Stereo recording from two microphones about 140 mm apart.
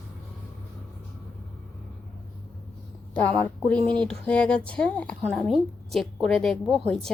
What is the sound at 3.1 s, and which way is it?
Speech, 10° left (ahead or behind).